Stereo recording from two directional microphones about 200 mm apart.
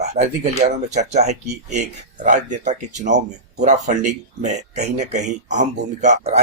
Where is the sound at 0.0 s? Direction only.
35° right (ahead or behind).